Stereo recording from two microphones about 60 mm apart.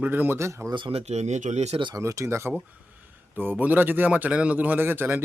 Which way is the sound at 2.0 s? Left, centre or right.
Right.